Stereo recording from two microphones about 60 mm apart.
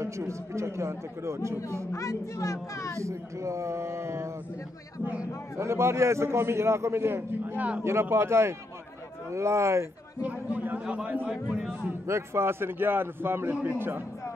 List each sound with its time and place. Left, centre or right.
0.0 s a man's voice: right
1.9 s speech: left
3.0 s speech: right
5.6 s a man's voice: right
7.5 s speech: right
7.8 s a man's voice: right
10.2 s speech: right
11.4 s a man's voice: centre
12.1 s a man's voice: right